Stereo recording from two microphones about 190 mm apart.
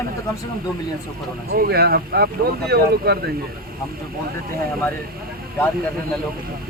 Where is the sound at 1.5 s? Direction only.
55° right (ahead or behind).